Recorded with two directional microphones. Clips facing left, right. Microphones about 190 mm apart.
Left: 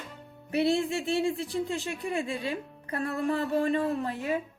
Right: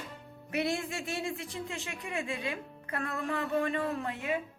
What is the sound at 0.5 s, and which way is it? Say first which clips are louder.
Speech: left 7 dB; 30° left (ahead or behind).